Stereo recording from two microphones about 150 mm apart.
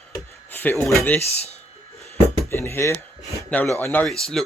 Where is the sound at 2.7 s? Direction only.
15° left (ahead or behind).